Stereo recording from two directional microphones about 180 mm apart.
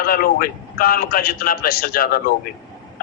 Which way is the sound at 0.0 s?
55° left (ahead or behind).